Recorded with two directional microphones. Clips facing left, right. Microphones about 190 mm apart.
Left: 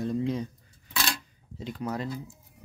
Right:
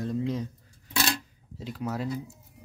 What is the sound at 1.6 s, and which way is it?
Speech, 5° right (ahead or behind).